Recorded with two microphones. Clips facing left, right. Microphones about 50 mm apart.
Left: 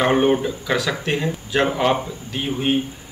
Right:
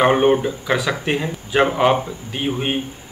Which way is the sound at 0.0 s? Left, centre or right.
Centre.